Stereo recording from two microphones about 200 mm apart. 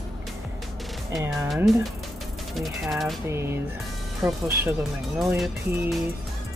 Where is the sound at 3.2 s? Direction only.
10° right (ahead or behind).